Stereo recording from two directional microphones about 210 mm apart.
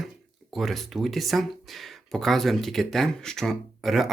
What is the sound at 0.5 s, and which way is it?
Speech, centre (ahead or behind).